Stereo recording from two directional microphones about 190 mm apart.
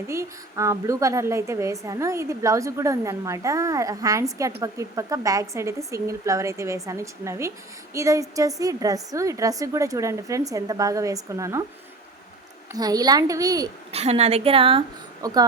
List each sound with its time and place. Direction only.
0.1 s a woman's voice: 15° right (ahead or behind)
12.7 s a woman's voice: 20° right (ahead or behind)
13.9 s a woman's voice: 35° right (ahead or behind)